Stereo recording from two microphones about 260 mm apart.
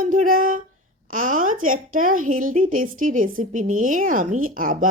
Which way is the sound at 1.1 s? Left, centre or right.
Right.